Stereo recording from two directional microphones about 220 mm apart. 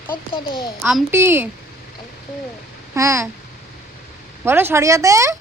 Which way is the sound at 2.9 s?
15° right (ahead or behind).